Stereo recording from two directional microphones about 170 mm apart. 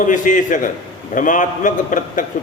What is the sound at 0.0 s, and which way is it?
A man's voice, 50° left (ahead or behind).